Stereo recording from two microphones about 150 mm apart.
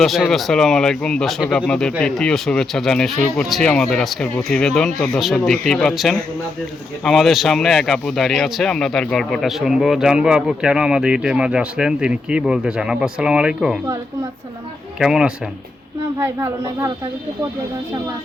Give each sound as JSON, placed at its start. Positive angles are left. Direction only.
{"t": 0.0, "sound": "speech", "side_deg": 0}
{"t": 14.9, "sound": "speech", "side_deg": -5}
{"t": 16.1, "sound": "a child's voice", "side_deg": -20}